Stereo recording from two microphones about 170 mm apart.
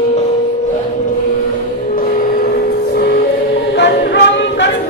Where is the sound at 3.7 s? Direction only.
85° left.